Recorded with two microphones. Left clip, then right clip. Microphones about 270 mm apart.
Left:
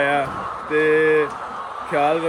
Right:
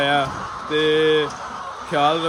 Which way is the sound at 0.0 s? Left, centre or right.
Centre.